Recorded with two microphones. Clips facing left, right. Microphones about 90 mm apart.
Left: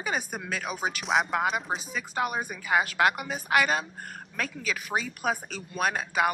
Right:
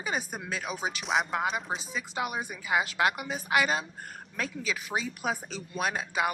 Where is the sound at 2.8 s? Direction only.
25° right (ahead or behind).